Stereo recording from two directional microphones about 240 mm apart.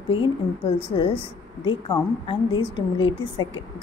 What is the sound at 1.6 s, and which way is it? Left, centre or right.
A woman's voice, centre.